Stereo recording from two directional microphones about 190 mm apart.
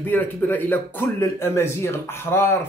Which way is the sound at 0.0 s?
10° left (ahead or behind).